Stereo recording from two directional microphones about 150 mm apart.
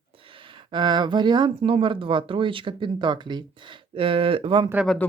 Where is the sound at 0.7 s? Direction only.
30° right (ahead or behind).